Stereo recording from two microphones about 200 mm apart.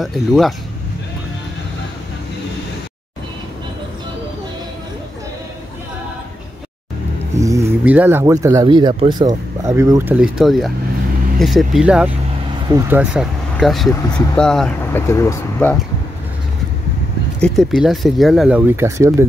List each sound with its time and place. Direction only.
0.0 s speech: centre (ahead or behind)
7.3 s speech: 15° right (ahead or behind); by 15.8 s 10° left (ahead or behind)
17.4 s speech: centre (ahead or behind)